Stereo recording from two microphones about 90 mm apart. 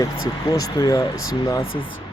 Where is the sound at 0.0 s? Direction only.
45° left (ahead or behind).